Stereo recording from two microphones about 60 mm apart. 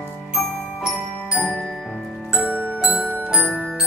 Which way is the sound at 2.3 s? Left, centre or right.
Left.